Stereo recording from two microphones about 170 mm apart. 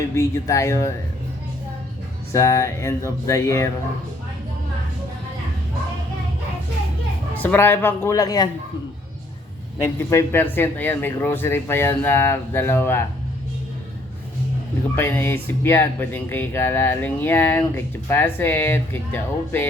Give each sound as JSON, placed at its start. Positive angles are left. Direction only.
{"t": 0.1, "sound": "speech", "side_deg": 15}
{"t": 2.3, "sound": "speech", "side_deg": 15}
{"t": 7.4, "sound": "speech", "side_deg": 10}
{"t": 9.8, "sound": "speech", "side_deg": 15}
{"t": 14.9, "sound": "speech", "side_deg": 10}